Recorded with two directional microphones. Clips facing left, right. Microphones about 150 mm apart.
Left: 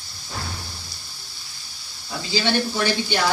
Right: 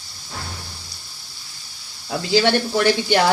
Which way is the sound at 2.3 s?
70° right (ahead or behind).